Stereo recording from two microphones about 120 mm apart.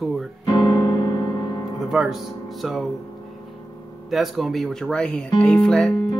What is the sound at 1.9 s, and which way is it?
Speech, 5° right (ahead or behind).